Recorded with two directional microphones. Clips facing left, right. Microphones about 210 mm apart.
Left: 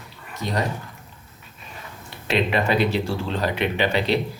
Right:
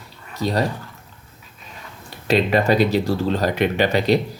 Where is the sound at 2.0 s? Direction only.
40° right (ahead or behind).